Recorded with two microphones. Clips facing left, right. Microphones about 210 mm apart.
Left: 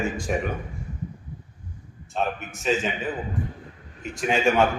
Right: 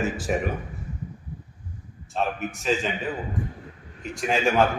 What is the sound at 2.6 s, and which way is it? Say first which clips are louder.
Speech: left 2 dB; centre (ahead or behind).